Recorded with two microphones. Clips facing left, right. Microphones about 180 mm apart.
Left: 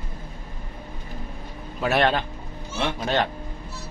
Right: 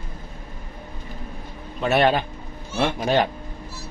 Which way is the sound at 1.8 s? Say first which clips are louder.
Right 2 dB; centre (ahead or behind).